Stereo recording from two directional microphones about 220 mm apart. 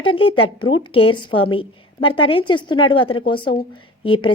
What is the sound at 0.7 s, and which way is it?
A woman's voice, 20° left (ahead or behind).